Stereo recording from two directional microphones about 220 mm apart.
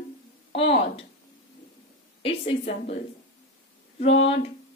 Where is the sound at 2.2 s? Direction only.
25° left (ahead or behind).